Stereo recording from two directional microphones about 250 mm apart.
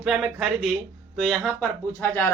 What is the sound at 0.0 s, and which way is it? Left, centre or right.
Speech, centre.